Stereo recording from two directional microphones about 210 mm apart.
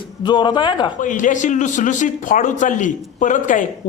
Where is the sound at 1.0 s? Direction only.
40° left (ahead or behind).